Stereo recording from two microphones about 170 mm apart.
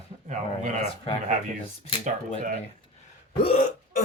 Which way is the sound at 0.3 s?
45° right (ahead or behind).